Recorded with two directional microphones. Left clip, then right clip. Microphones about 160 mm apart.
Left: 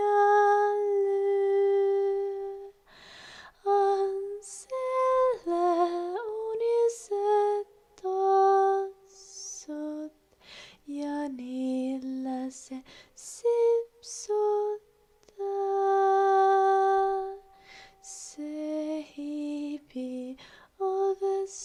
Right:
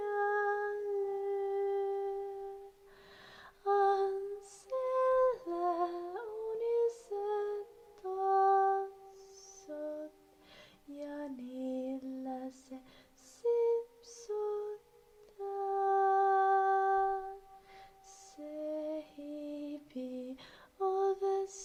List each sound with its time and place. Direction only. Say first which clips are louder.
0.0 s humming: left 11 dB; 40° left (ahead or behind)
3.2 s lullaby: left 8 dB; 20° left (ahead or behind)
9.4 s music: left 7 dB; 35° left (ahead or behind)
10.5 s lullaby: left 11 dB; 30° left (ahead or behind)
15.4 s music: left 7 dB; 30° left (ahead or behind)
17.7 s lullaby: left 7 dB; 30° left (ahead or behind); by 21.6 s 5° left (ahead or behind)